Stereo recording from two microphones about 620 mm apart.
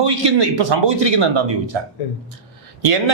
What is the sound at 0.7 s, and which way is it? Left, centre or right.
A man's voice, right.